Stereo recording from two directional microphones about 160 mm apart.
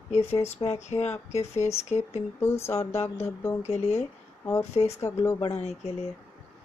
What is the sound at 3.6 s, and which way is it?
Speech, 45° left (ahead or behind).